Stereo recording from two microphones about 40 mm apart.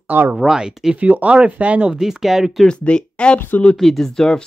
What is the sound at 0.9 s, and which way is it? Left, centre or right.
Speech, right.